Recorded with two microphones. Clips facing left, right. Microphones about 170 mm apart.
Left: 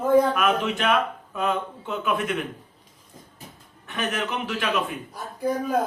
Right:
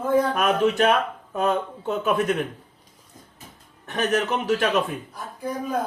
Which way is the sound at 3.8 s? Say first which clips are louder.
Right 5 dB; 40° right (ahead or behind).